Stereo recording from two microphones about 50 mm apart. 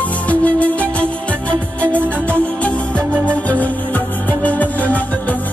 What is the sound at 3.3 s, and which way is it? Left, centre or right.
Music, left.